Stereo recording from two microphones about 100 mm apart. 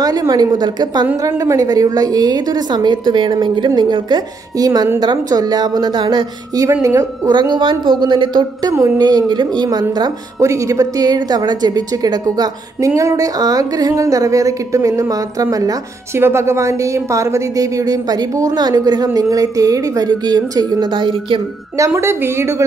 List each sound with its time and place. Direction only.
0.0 s a woman's voice: 40° right (ahead or behind)
6.7 s a woman's voice: 30° right (ahead or behind)
7.3 s a woman's voice: 50° right (ahead or behind)
8.7 s a woman's voice: 30° right (ahead or behind)
9.0 s a woman's voice: 45° right (ahead or behind)
10.4 s a woman's voice: 30° right (ahead or behind)
16.2 s a woman's voice: 25° right (ahead or behind); by 21.4 s 55° right (ahead or behind)
21.7 s a woman's voice: 30° right (ahead or behind)